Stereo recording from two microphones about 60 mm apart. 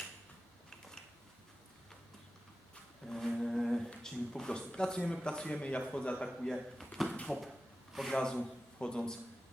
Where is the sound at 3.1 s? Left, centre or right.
Centre.